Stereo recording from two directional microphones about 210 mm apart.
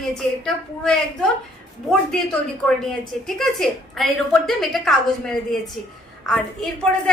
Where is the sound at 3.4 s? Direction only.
Centre (ahead or behind).